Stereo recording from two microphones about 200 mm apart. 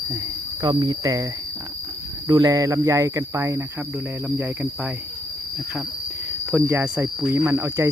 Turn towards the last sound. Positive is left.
turn(degrees=-15)  # may be behind; listen again after turning